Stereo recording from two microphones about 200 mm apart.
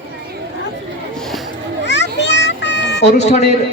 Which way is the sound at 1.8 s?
60° left (ahead or behind).